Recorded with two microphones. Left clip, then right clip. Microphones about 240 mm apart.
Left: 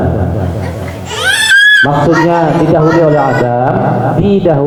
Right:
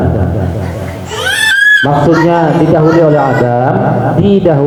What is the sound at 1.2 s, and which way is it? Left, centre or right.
Speech, centre.